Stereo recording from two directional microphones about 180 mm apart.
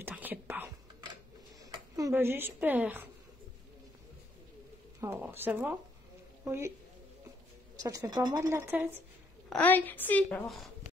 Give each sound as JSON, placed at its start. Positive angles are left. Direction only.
{"t": 0.0, "sound": "whispering", "side_deg": -10}
{"t": 1.6, "sound": "speech", "side_deg": -20}
{"t": 5.0, "sound": "a woman's voice", "side_deg": -10}
{"t": 7.7, "sound": "speech", "side_deg": -20}
{"t": 9.5, "sound": "a woman's voice", "side_deg": 10}